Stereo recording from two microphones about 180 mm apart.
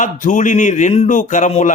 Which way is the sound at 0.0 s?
45° left (ahead or behind).